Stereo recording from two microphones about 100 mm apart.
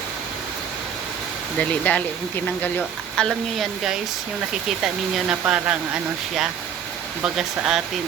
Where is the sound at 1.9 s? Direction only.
15° left (ahead or behind).